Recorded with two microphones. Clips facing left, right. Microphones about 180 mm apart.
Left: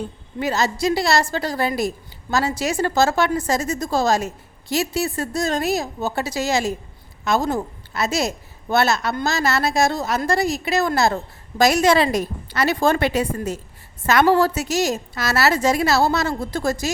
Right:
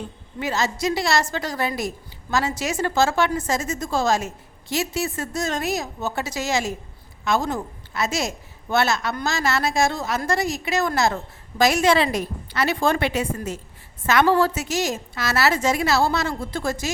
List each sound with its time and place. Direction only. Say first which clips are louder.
0.3 s a woman's voice: left 3 dB; 35° left (ahead or behind)